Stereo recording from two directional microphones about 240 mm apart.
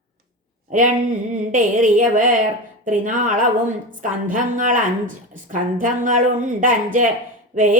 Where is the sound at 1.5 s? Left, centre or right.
Right.